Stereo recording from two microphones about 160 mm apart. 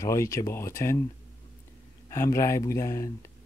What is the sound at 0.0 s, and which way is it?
Speech, 20° left (ahead or behind).